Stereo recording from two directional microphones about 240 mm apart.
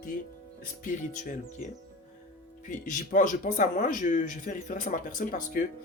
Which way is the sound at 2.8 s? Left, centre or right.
Left.